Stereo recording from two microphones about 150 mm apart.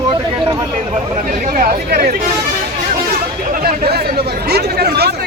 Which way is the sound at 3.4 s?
80° right.